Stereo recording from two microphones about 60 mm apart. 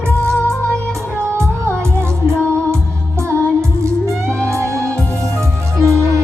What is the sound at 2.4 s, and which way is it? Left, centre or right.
Music, centre.